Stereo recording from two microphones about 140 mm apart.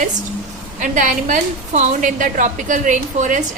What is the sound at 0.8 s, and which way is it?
A woman's voice, 70° right (ahead or behind).